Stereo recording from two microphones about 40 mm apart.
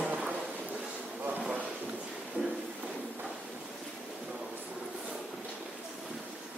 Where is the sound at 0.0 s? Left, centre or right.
Right.